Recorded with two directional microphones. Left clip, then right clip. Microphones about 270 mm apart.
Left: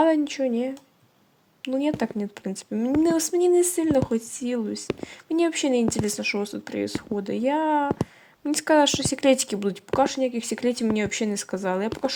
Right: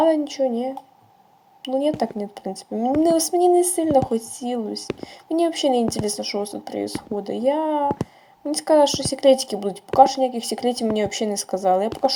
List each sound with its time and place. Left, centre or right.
0.0 s speech: left